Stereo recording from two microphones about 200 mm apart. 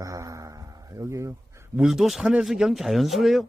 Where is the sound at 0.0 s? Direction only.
15° right (ahead or behind).